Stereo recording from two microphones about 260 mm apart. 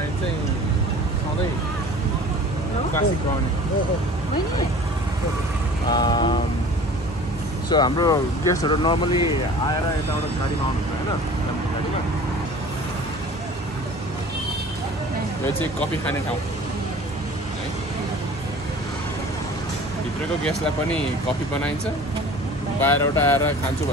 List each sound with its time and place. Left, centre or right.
5.9 s speech: centre
7.7 s speech: centre
22.8 s speech: centre